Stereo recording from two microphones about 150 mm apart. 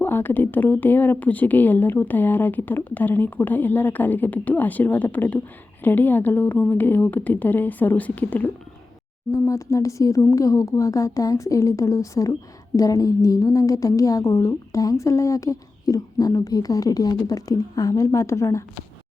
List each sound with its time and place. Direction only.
0.0 s speech: 15° left (ahead or behind)